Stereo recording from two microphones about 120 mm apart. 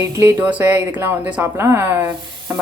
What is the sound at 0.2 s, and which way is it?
Speech, 15° right (ahead or behind).